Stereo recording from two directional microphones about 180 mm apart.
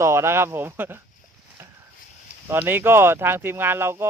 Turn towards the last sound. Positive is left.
turn(degrees=-15)  # may be behind; listen again after turning